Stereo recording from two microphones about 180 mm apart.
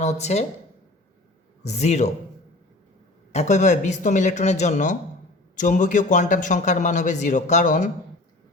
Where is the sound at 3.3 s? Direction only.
40° left (ahead or behind).